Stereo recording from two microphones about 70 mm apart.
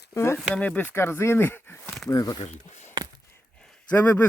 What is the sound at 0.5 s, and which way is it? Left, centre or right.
Speech, centre.